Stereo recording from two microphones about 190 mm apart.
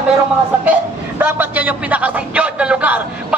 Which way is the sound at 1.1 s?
10° right (ahead or behind).